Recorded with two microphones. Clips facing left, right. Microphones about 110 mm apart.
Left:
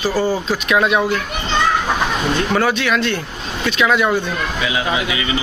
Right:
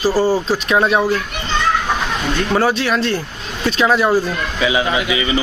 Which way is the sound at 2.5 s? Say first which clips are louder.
Right 3 dB; 30° right (ahead or behind).